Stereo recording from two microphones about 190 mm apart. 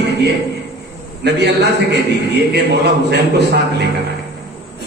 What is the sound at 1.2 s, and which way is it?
Speech, 60° right (ahead or behind).